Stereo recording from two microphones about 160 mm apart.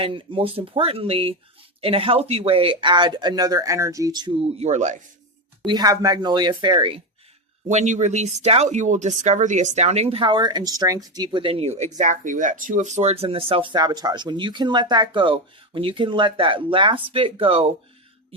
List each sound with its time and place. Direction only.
0.0 s speech: 35° right (ahead or behind)
5.6 s speech: 25° right (ahead or behind)
7.7 s speech: 45° right (ahead or behind)